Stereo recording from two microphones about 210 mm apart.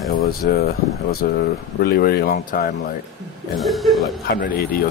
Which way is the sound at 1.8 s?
45° left (ahead or behind).